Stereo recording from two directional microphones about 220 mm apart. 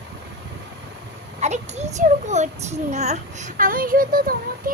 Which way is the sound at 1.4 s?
30° right (ahead or behind).